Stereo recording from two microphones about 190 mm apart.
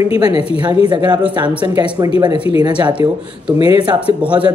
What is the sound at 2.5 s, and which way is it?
Speech, 30° left (ahead or behind).